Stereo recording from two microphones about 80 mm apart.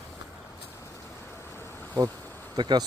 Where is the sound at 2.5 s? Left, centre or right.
Right.